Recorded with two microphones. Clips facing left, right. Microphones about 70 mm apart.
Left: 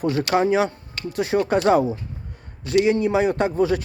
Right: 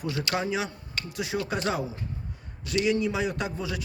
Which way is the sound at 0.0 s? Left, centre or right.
Left.